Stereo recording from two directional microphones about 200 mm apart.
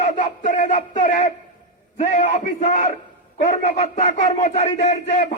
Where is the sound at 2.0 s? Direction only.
35° left (ahead or behind).